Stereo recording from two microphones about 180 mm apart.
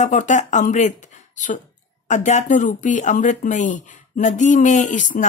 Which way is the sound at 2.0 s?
40° left (ahead or behind).